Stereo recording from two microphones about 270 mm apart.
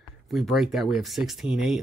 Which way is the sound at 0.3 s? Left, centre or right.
Centre.